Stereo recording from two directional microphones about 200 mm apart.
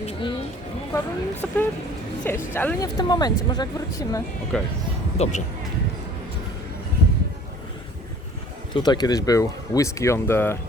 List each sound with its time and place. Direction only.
0.0 s a sound: 25° left (ahead or behind)
0.9 s speech: 10° left (ahead or behind)
3.0 s a woman's voice: 20° left (ahead or behind)
4.5 s speech: 5° left (ahead or behind)
5.1 s speech: 35° left (ahead or behind)
8.7 s speech: 20° left (ahead or behind)